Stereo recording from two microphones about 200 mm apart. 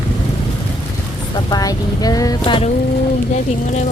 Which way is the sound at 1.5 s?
20° left (ahead or behind).